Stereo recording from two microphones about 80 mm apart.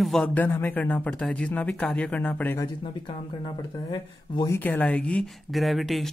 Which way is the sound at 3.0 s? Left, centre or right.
Left.